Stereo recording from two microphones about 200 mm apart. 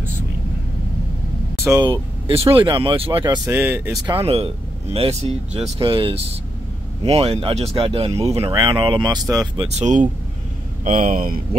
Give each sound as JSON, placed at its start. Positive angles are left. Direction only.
{"t": 1.6, "sound": "speech", "side_deg": -20}
{"t": 3.5, "sound": "speech", "side_deg": -10}
{"t": 4.2, "sound": "speech", "side_deg": -30}
{"t": 9.7, "sound": "speech", "side_deg": -35}